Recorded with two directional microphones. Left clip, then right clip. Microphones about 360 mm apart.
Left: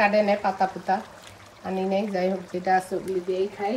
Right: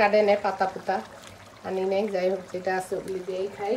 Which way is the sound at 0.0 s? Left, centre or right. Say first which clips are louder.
Even; centre.